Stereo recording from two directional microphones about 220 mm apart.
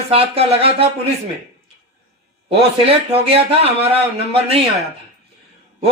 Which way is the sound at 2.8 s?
25° right (ahead or behind).